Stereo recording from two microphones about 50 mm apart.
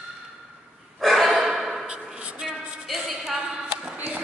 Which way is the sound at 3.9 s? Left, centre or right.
Right.